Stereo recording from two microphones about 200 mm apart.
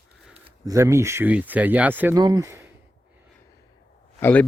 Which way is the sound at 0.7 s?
15° right (ahead or behind).